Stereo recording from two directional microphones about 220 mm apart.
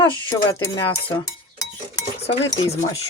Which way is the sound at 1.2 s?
15° left (ahead or behind).